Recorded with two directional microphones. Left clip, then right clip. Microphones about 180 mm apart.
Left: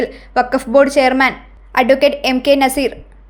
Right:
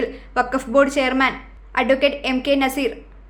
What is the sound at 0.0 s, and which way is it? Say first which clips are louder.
A woman's voice: left 5 dB; 30° left (ahead or behind).